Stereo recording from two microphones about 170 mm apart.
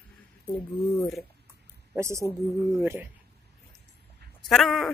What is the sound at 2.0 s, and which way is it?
Speech, 15° right (ahead or behind).